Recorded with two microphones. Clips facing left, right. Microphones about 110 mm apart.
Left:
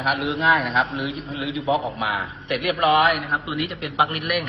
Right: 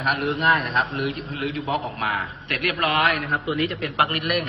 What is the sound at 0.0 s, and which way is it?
A man's voice, centre (ahead or behind).